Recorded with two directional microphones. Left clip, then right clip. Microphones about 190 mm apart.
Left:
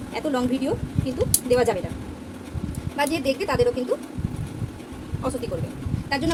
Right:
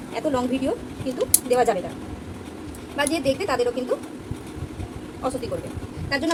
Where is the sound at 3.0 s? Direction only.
20° left (ahead or behind).